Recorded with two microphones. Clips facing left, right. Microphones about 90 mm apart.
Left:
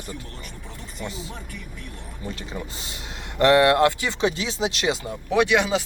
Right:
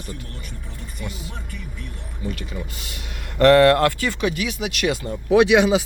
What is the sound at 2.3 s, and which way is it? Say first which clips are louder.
Speech: right 1 dB; 30° left (ahead or behind).